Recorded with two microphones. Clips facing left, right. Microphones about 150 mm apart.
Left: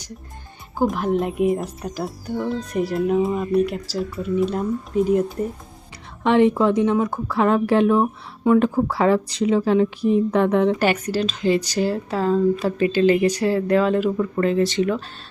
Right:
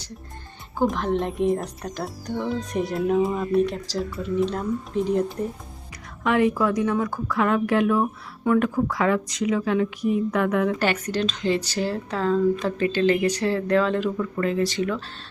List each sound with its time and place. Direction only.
0.8 s speech: 10° left (ahead or behind)
6.2 s a woman's voice: 30° left (ahead or behind)
10.8 s speech: 10° left (ahead or behind)
14.2 s a woman's voice: 30° left (ahead or behind)